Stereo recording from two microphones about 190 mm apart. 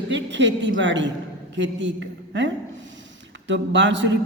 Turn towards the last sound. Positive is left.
turn(degrees=-70)  # may be behind; listen again after turning